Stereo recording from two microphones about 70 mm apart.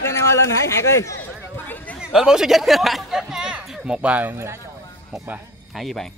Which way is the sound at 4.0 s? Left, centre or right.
Right.